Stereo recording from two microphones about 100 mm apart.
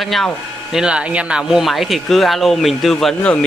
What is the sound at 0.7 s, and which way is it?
Speech, 10° right (ahead or behind).